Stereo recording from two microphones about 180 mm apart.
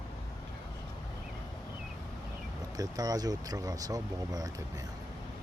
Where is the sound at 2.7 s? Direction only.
20° right (ahead or behind).